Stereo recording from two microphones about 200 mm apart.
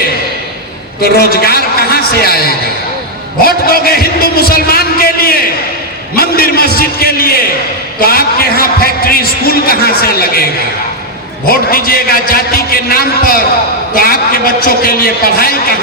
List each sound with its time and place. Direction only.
1.0 s a man's voice: 50° left (ahead or behind)
11.4 s a man's voice: 45° left (ahead or behind)